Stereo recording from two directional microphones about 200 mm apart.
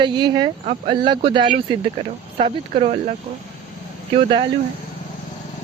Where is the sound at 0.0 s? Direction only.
20° right (ahead or behind).